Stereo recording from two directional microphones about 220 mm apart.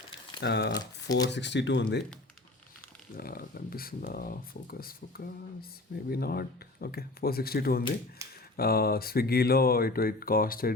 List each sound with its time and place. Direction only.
0.3 s speech: 50° left (ahead or behind)
3.2 s speech: 45° left (ahead or behind)
8.2 s a sound: 15° right (ahead or behind)
8.5 s speech: 45° left (ahead or behind)